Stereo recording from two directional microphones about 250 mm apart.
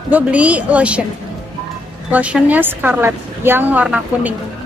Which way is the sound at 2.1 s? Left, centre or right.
Centre.